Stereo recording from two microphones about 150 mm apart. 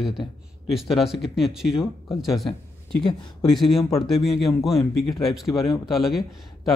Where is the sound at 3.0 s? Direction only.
30° left (ahead or behind).